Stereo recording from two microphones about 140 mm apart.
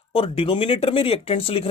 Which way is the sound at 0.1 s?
40° left (ahead or behind).